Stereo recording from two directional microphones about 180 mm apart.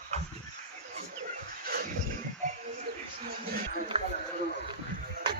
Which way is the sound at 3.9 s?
35° right (ahead or behind).